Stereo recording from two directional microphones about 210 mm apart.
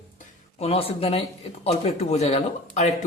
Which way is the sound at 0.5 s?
30° left (ahead or behind).